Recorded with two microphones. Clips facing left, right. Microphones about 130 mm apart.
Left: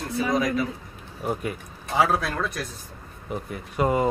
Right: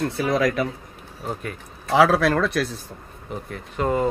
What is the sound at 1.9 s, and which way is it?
Speech, 85° right.